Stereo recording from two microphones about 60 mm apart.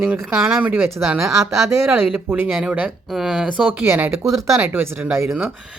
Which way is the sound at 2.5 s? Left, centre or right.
Centre.